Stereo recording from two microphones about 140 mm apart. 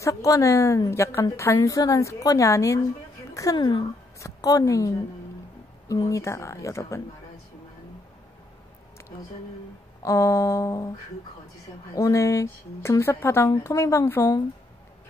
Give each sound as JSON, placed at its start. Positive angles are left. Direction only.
{"t": 0.0, "sound": "a woman's voice", "side_deg": 25}
{"t": 10.0, "sound": "a woman's voice", "side_deg": 20}
{"t": 11.9, "sound": "a woman's voice", "side_deg": 25}